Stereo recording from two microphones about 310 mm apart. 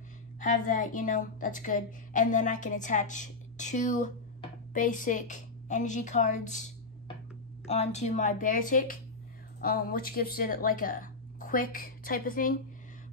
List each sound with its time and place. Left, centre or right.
0.4 s a woman's voice: left
7.6 s a woman's voice: left